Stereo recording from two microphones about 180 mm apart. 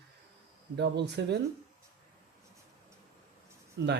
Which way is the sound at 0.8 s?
70° right (ahead or behind).